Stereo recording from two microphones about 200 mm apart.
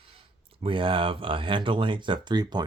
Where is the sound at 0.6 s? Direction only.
25° right (ahead or behind).